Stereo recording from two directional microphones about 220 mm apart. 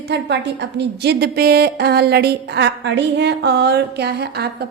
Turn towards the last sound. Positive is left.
turn(degrees=-50)  # may be behind; listen again after turning